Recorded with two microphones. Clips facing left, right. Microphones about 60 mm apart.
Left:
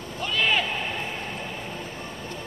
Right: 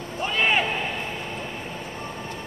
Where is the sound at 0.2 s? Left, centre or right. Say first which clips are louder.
Right 2 dB; right.